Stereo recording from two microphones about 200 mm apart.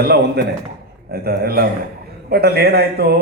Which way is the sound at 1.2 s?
50° right (ahead or behind).